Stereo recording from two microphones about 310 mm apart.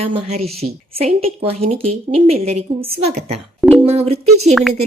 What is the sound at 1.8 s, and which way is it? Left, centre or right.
Speech, right.